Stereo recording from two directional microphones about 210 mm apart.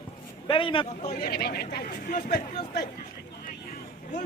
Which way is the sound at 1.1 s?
45° left (ahead or behind).